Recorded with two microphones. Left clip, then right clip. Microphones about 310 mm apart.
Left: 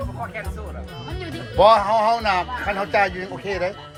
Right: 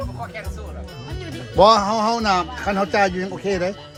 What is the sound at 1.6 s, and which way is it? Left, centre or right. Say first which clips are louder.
A man's voice: even; centre.